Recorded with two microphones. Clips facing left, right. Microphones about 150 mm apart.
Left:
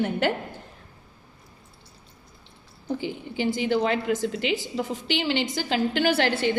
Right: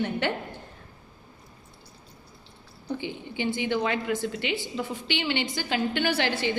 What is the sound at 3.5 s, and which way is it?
A woman's voice, 40° left (ahead or behind).